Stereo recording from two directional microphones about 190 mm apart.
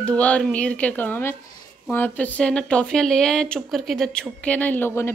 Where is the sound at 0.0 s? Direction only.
5° left (ahead or behind).